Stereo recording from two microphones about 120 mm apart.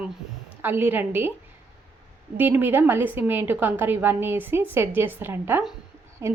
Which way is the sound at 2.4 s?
15° right (ahead or behind).